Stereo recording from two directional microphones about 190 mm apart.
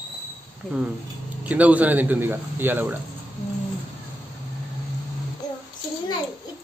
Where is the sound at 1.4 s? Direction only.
10° right (ahead or behind).